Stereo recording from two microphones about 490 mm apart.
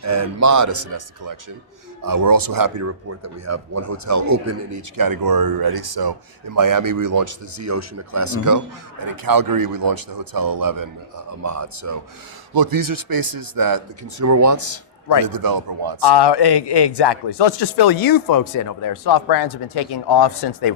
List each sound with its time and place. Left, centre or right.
0.0 s speech: right
16.0 s a man's voice: left